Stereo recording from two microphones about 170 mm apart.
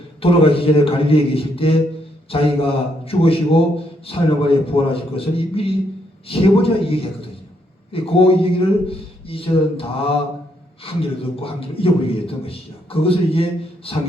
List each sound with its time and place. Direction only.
0.2 s a man's voice: 35° left (ahead or behind)